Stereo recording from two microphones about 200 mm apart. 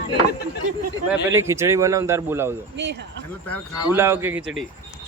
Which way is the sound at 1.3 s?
15° right (ahead or behind).